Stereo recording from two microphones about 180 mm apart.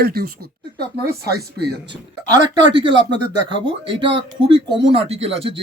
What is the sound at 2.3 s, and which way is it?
Speech, 25° right (ahead or behind).